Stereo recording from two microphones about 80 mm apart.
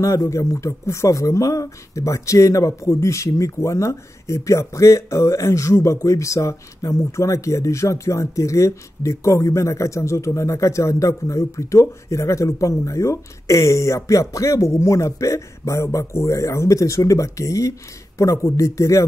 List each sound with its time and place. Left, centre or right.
0.0 s speech: left